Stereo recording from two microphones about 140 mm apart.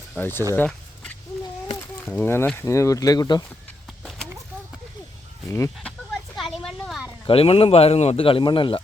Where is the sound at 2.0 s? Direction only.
15° left (ahead or behind).